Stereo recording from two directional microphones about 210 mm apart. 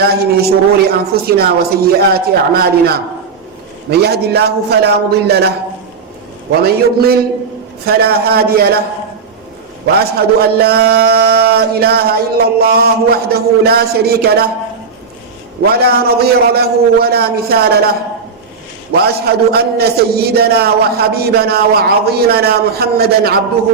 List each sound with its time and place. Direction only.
0.0 s a man's voice: 50° right (ahead or behind)
6.6 s a man's voice: 50° right (ahead or behind)
9.8 s a man's voice: 50° right (ahead or behind)
15.6 s a man's voice: 50° right (ahead or behind)